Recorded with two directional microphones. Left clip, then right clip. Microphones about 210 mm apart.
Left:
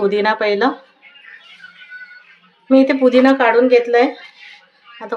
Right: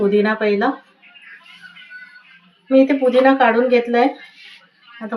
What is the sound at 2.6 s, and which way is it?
A woman's voice, 55° left (ahead or behind).